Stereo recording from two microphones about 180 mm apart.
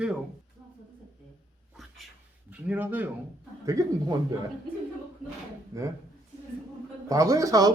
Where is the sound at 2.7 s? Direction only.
10° right (ahead or behind).